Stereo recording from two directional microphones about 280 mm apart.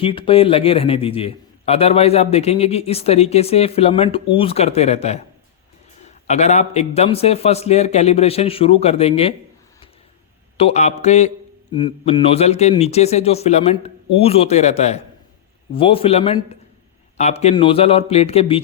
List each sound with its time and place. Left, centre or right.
0.0 s a man's voice: centre
10.6 s a man's voice: left